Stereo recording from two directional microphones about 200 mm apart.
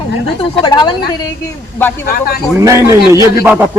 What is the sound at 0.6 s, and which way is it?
Speech, 20° left (ahead or behind).